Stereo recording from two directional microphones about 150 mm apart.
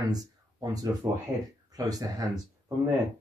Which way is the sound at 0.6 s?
25° right (ahead or behind).